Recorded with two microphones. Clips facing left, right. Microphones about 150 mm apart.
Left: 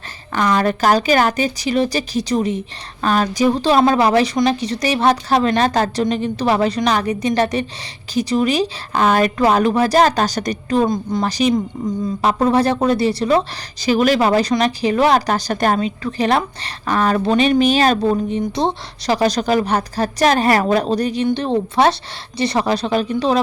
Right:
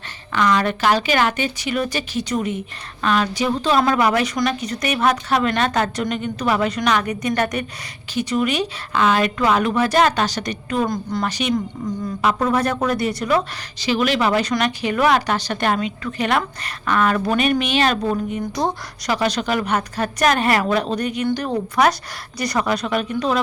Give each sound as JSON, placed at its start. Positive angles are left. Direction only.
{"t": 0.3, "sound": "a woman's voice", "side_deg": 35}
{"t": 10.8, "sound": "a woman's voice", "side_deg": 20}
{"t": 11.3, "sound": "a woman's voice", "side_deg": 35}
{"t": 13.8, "sound": "a woman's voice", "side_deg": 40}